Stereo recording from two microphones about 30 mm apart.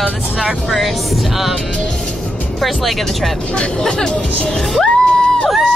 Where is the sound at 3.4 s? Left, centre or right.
Left.